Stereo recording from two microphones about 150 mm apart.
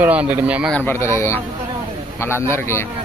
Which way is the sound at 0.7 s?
15° left (ahead or behind).